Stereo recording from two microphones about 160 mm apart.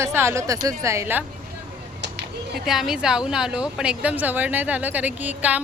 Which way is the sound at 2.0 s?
90° right.